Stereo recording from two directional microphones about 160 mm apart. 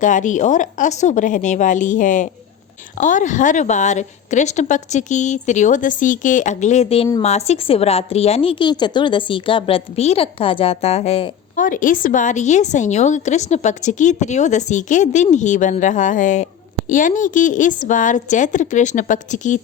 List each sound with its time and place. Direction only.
0.0 s a woman's voice: 50° left (ahead or behind)
11.5 s a woman's voice: 55° left (ahead or behind)